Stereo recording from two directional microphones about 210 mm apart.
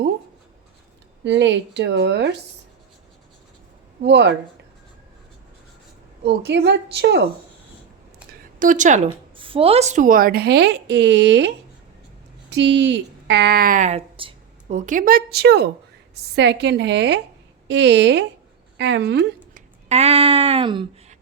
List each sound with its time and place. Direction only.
1.2 s a woman's voice: 55° right (ahead or behind)
4.0 s a woman's voice: 55° right (ahead or behind)
6.2 s speech: 55° right (ahead or behind)
8.3 s a sound: 40° right (ahead or behind)
9.4 s a woman's voice: 25° right (ahead or behind); by 19.6 s 50° right (ahead or behind)
19.9 s a sound: 30° right (ahead or behind)